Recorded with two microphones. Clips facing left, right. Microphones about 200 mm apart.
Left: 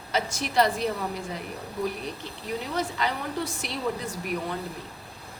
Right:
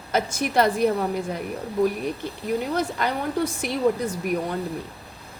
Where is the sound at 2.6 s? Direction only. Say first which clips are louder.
Right 4 dB; 50° right (ahead or behind).